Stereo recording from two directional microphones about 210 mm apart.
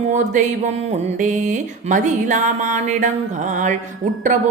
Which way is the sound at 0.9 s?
35° right (ahead or behind).